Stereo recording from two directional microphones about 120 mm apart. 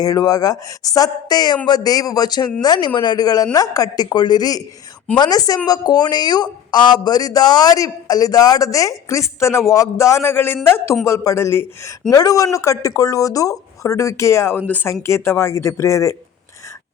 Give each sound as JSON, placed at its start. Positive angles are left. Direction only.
{"t": 0.0, "sound": "a woman's voice", "side_deg": 30}